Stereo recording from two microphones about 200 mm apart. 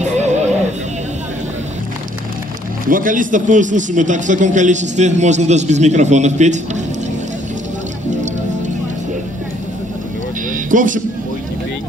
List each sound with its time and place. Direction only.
0.0 s music: 35° right (ahead or behind)
2.9 s a man's voice: 40° right (ahead or behind)
10.5 s vehicle: 40° right (ahead or behind)